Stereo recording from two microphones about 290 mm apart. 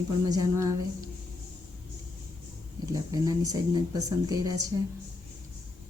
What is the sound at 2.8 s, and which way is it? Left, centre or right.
Speech, centre.